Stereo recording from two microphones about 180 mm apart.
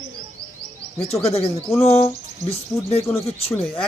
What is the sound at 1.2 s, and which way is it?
Speech, 35° left (ahead or behind).